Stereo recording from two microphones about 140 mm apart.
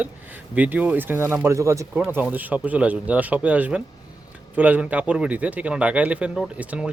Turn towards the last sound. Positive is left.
turn(degrees=-10)  # may be behind; listen again after turning